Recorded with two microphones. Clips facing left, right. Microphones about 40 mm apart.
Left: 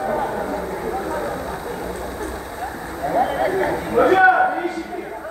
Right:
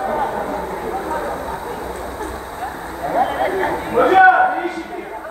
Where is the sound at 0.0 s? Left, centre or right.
Right.